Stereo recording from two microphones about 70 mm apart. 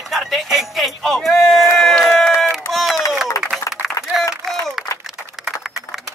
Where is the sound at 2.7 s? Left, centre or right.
Centre.